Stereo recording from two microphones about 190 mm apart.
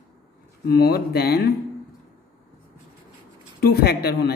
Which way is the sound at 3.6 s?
55° left (ahead or behind).